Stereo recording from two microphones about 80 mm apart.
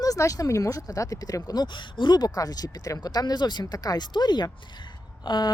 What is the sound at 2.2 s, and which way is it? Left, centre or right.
Speech, left.